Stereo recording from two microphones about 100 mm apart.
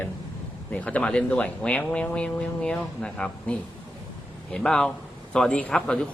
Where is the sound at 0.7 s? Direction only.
15° left (ahead or behind).